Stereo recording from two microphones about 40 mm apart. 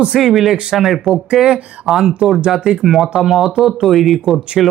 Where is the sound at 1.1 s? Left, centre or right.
Centre.